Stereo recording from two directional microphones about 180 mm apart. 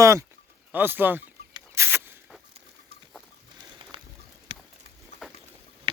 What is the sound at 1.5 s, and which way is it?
Rodents, 15° right (ahead or behind).